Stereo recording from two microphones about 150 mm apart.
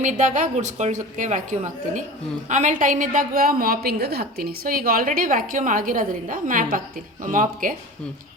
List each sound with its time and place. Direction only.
0.0 s a woman's voice: 55° right (ahead or behind)